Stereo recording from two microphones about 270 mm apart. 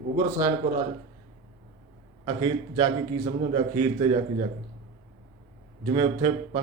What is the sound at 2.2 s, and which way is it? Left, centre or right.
A man's voice, centre.